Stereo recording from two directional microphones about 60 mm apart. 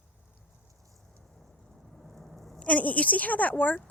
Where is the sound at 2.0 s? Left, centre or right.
Centre.